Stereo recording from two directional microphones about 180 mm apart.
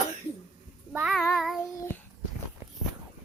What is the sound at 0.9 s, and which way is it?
Speech, 5° right (ahead or behind).